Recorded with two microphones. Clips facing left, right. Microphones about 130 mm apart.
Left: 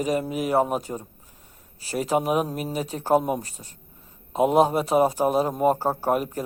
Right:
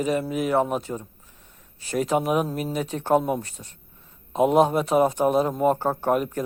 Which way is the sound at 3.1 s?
10° left (ahead or behind).